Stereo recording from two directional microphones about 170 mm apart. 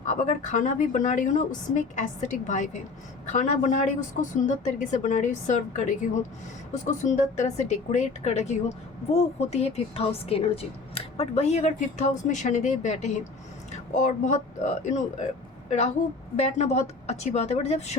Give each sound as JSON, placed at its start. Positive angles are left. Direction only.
{"t": 0.0, "sound": "a woman's voice", "side_deg": 45}
{"t": 16.4, "sound": "a woman's voice", "side_deg": 40}